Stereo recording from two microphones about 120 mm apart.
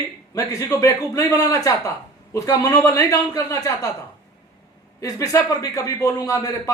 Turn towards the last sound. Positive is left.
turn(degrees=30)  # may be behind; listen again after turning